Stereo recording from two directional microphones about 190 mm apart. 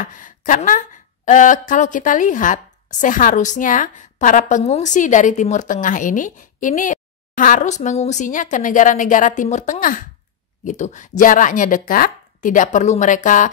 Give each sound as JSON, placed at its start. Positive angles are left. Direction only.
{"t": 0.0, "sound": "speech", "side_deg": 45}